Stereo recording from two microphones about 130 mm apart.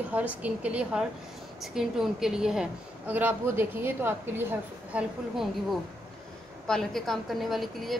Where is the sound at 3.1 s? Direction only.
15° right (ahead or behind).